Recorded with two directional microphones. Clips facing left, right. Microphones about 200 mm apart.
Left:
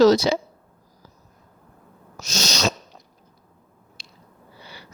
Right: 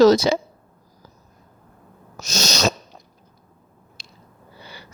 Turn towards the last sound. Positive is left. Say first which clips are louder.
# right 2 dB
turn(degrees=-45)  # may be behind; listen again after turning